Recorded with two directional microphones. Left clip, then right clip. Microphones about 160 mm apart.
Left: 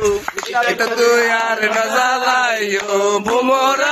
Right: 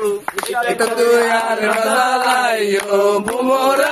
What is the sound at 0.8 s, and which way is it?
Chant, 10° left (ahead or behind).